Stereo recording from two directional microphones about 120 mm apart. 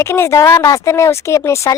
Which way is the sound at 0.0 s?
20° left (ahead or behind).